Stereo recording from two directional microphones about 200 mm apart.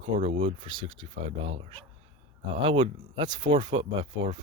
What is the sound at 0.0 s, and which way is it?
Speech, 25° right (ahead or behind).